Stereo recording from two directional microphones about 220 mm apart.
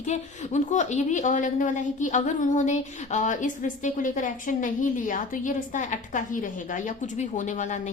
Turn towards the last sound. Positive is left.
turn(degrees=35)  # may be behind; listen again after turning